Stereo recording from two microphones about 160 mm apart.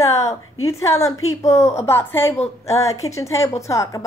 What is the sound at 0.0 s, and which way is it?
A woman's voice, 20° left (ahead or behind).